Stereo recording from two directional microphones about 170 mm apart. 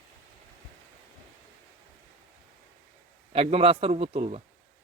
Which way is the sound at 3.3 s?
35° right (ahead or behind).